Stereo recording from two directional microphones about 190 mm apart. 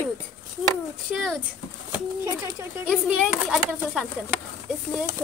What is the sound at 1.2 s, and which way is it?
Speech, centre (ahead or behind).